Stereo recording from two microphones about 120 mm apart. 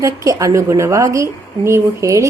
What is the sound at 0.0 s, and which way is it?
A woman's voice, 25° right (ahead or behind).